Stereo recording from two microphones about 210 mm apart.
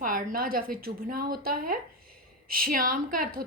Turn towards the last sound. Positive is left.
turn(degrees=-40)  # may be behind; listen again after turning